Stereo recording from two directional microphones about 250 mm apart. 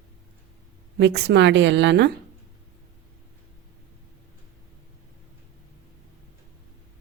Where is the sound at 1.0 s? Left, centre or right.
Right.